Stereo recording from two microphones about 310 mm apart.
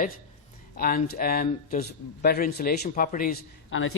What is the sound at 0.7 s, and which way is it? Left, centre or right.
A man's voice, left.